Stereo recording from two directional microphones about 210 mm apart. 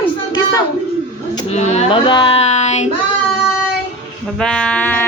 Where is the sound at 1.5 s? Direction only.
35° left (ahead or behind).